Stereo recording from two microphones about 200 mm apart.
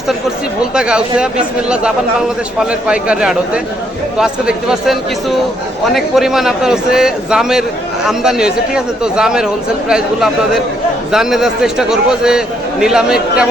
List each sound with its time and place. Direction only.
0.7 s a man's voice: 5° right (ahead or behind)
2.8 s a man's voice: 5° right (ahead or behind)